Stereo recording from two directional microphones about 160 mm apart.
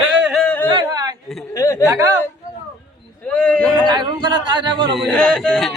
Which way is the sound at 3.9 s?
30° right (ahead or behind).